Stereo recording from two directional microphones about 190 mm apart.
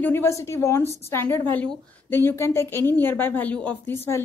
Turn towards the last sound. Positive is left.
turn(degrees=15)  # may be behind; listen again after turning